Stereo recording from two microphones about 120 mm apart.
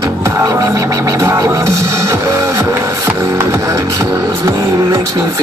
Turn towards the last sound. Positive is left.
turn(degrees=-25)  # may be behind; listen again after turning